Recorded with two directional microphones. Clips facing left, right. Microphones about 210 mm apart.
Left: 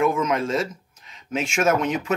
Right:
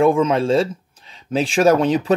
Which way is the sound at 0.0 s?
30° right (ahead or behind).